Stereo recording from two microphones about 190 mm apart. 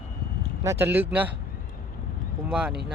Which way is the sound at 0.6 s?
10° right (ahead or behind).